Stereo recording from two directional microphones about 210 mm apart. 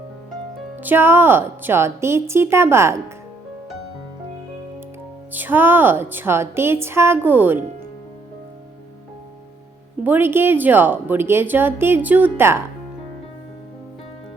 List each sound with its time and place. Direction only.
0.8 s a woman's voice: 10° right (ahead or behind)
5.3 s a woman's voice: 10° right (ahead or behind)
10.0 s a woman's voice: 10° right (ahead or behind)